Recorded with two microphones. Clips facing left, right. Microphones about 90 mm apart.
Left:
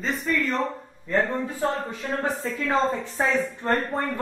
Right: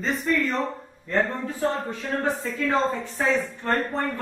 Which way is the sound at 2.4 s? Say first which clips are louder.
Even; 20° left (ahead or behind).